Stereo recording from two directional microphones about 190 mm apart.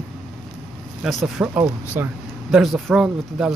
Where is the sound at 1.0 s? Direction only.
Centre (ahead or behind).